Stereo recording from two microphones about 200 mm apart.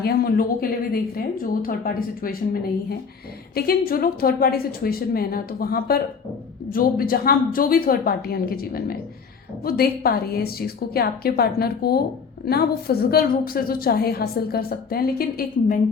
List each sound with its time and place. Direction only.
0.0 s a woman's voice: 50° left (ahead or behind)